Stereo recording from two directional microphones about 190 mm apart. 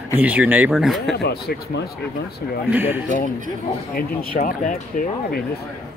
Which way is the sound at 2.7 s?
10° right (ahead or behind).